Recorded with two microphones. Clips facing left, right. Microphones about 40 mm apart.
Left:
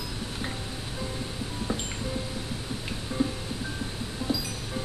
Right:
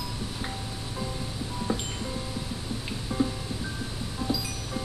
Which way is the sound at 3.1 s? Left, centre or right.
Centre.